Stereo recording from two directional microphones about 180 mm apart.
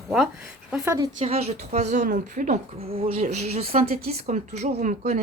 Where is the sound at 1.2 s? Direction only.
35° right (ahead or behind).